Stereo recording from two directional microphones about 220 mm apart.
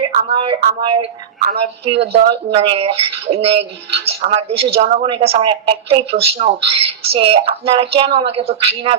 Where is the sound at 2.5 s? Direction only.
25° right (ahead or behind).